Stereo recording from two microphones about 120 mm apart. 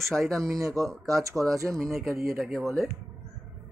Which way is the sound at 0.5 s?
25° right (ahead or behind).